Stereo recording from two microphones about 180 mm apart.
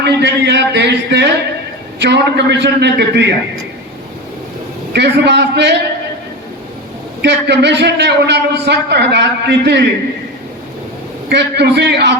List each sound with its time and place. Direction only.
0.0 s a man's voice: 70° right (ahead or behind)
4.9 s a man's voice: 70° right (ahead or behind)
7.2 s a man's voice: 70° right (ahead or behind)
11.3 s a man's voice: 65° right (ahead or behind)